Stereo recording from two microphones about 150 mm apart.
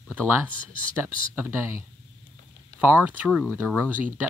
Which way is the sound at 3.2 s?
5° right (ahead or behind).